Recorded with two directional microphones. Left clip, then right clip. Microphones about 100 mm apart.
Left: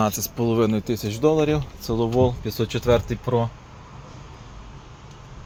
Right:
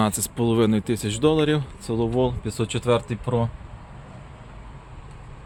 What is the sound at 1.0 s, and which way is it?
Speech, 65° right (ahead or behind).